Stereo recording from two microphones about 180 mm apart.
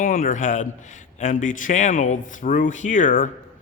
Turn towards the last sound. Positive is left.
turn(degrees=45)  # may be behind; listen again after turning